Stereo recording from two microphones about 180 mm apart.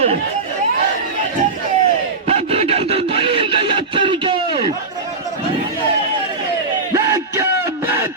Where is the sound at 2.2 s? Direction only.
35° right (ahead or behind).